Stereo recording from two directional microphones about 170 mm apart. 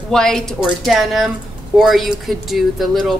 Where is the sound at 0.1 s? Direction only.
5° left (ahead or behind).